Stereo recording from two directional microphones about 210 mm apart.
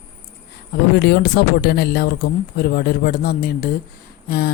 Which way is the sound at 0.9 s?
50° left (ahead or behind).